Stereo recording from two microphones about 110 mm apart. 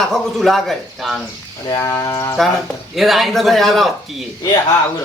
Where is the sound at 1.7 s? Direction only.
25° left (ahead or behind).